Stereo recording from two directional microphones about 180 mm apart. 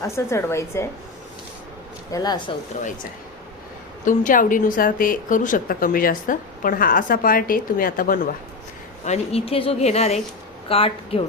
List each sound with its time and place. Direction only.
0.0 s a woman's voice: 15° left (ahead or behind)
2.1 s speech: 25° left (ahead or behind)
4.0 s a woman's voice: 45° left (ahead or behind)
9.0 s a woman's voice: 35° left (ahead or behind)